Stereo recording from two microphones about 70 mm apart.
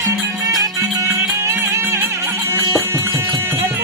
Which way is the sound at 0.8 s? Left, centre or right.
Right.